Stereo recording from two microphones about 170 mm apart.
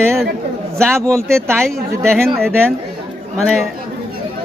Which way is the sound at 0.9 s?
15° right (ahead or behind).